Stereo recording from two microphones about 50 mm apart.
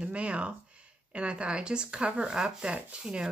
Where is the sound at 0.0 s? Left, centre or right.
Right.